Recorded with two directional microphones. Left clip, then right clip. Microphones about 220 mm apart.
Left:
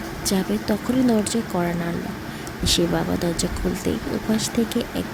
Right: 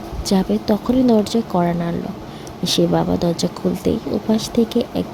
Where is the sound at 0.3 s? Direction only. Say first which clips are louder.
Right 5 dB; 15° right (ahead or behind).